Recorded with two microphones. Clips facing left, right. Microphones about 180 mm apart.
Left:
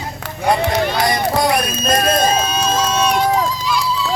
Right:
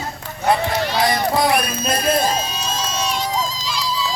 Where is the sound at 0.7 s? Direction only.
50° left (ahead or behind).